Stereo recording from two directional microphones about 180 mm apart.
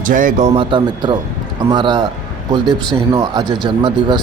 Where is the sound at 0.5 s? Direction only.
25° right (ahead or behind).